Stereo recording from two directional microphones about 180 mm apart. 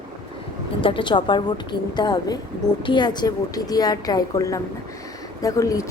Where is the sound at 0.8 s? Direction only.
30° left (ahead or behind).